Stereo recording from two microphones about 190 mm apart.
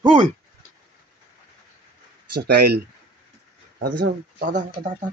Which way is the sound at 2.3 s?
55° right (ahead or behind).